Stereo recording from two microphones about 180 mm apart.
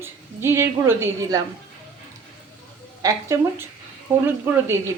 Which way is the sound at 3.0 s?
15° right (ahead or behind).